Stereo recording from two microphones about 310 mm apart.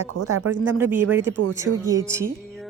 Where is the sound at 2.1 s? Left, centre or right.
Centre.